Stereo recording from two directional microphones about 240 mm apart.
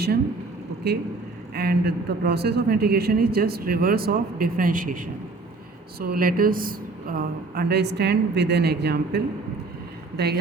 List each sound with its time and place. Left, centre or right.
1.5 s a woman's voice: right